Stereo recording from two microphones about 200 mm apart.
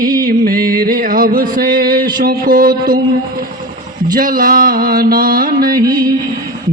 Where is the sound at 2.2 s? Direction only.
45° right (ahead or behind).